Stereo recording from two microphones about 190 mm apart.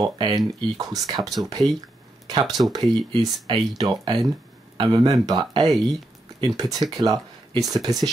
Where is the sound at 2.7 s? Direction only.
20° right (ahead or behind).